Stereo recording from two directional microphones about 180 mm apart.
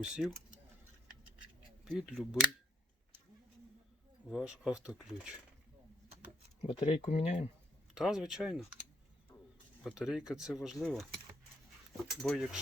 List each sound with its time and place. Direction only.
0.0 s speech: centre (ahead or behind)
1.8 s speech: 5° right (ahead or behind)
4.3 s speech: 5° right (ahead or behind)
6.6 s speech: 35° left (ahead or behind)
7.9 s speech: centre (ahead or behind)
9.8 s speech: 5° right (ahead or behind)
12.2 s speech: centre (ahead or behind)